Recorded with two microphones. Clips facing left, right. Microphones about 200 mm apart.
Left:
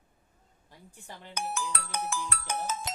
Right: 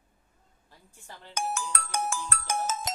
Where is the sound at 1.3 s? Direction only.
45° right (ahead or behind).